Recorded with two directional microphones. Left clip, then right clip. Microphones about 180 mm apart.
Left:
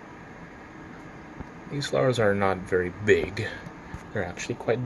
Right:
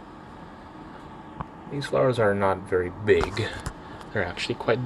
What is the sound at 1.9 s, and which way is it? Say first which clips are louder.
Speech: right 1 dB; 5° right (ahead or behind).